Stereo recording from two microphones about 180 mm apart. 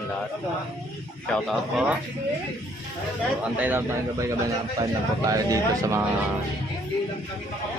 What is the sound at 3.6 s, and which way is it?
Speech, 10° right (ahead or behind).